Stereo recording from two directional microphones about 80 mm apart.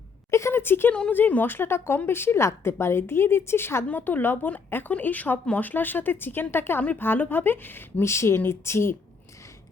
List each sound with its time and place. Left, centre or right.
0.3 s a woman's voice: left